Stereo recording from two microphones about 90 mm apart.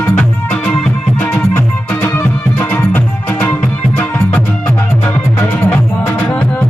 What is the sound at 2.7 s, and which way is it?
Music, 20° left (ahead or behind).